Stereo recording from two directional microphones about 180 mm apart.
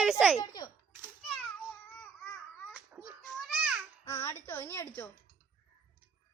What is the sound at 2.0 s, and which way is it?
Baby cry, 5° left (ahead or behind).